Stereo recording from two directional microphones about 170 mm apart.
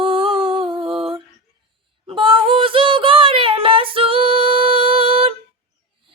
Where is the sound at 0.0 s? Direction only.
30° right (ahead or behind).